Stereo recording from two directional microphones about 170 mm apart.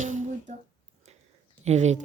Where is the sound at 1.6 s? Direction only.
40° right (ahead or behind).